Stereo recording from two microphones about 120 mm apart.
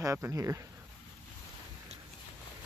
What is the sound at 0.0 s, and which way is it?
Speech, 25° right (ahead or behind).